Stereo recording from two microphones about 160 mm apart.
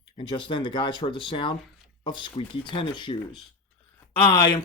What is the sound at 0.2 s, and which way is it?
Speech, 30° left (ahead or behind).